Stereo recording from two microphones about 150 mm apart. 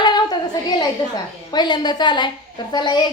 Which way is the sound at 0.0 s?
30° left (ahead or behind).